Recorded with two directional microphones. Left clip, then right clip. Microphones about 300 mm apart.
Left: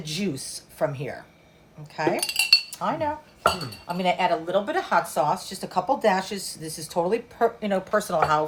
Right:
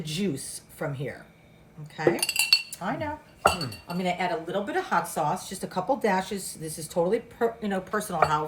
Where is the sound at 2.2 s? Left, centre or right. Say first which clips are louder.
Left 6 dB; centre.